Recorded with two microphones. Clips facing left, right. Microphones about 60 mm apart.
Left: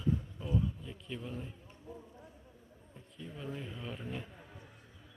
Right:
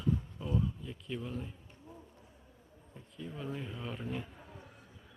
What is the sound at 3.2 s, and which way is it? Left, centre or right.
Speech, centre.